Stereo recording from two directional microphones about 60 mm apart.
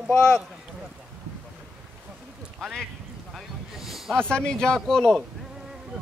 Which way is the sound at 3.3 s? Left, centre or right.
Centre.